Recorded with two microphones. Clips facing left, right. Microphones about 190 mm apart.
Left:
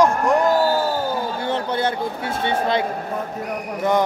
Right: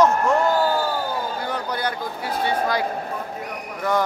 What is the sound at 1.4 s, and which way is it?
A man's voice, 25° left (ahead or behind).